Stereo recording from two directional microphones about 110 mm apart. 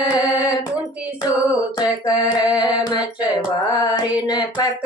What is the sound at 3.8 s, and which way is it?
Child singing, 40° left (ahead or behind).